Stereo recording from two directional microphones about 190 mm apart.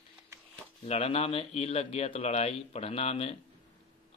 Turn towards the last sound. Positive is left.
turn(degrees=30)  # may be behind; listen again after turning